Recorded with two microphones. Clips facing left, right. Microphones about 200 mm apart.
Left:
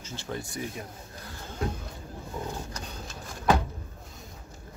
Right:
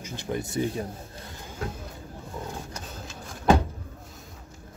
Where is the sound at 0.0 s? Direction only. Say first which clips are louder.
Right 5 dB; 15° right (ahead or behind).